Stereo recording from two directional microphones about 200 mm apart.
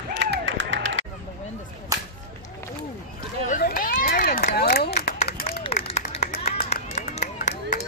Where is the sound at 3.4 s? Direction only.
40° left (ahead or behind).